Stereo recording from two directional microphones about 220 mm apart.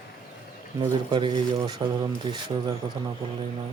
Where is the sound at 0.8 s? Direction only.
20° right (ahead or behind).